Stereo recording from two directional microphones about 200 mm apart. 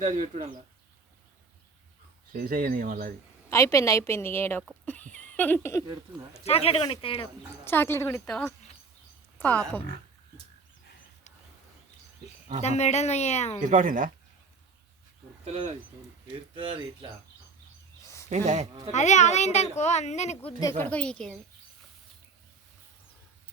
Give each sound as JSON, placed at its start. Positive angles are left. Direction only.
{"t": 0.0, "sound": "speech", "side_deg": -40}
{"t": 2.3, "sound": "speech", "side_deg": -45}
{"t": 3.5, "sound": "a woman's voice", "side_deg": 15}
{"t": 5.2, "sound": "a sound", "side_deg": 10}
{"t": 6.4, "sound": "speech", "side_deg": 30}
{"t": 7.6, "sound": "a woman's voice", "side_deg": 10}
{"t": 12.6, "sound": "a child's voice", "side_deg": 35}
{"t": 13.6, "sound": "speech", "side_deg": -40}
{"t": 16.2, "sound": "speech", "side_deg": -25}
{"t": 18.0, "sound": "a sound", "side_deg": 15}
{"t": 18.3, "sound": "speech", "side_deg": -35}
{"t": 18.9, "sound": "a child's voice", "side_deg": 35}